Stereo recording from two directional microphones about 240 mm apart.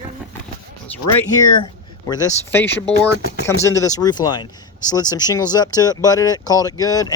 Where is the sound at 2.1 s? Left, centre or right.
Centre.